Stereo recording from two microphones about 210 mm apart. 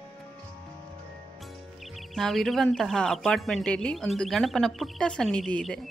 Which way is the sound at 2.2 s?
Centre (ahead or behind).